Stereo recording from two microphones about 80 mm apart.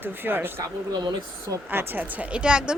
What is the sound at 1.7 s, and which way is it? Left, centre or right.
Speech, right.